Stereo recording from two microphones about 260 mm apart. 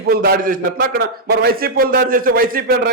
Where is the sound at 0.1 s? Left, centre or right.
Right.